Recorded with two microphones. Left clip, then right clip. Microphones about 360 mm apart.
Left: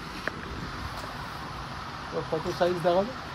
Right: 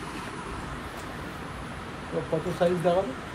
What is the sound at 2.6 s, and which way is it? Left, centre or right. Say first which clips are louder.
Speech: right 1 dB; left.